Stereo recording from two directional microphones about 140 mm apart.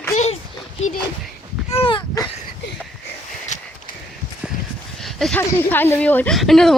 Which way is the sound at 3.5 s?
60° left (ahead or behind).